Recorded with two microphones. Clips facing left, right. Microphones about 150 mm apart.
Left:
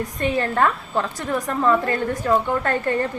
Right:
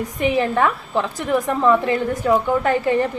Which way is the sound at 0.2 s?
15° right (ahead or behind).